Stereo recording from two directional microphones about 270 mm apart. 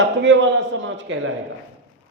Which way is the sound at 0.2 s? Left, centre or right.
Right.